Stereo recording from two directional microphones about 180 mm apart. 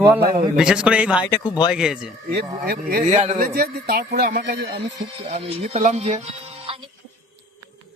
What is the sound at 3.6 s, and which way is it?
Speech, 60° right (ahead or behind).